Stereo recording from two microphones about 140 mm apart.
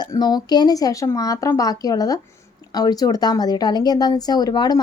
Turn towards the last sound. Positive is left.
turn(degrees=30)  # may be behind; listen again after turning